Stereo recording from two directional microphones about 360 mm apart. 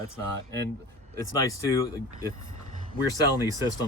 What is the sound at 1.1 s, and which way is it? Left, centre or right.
Speech, centre.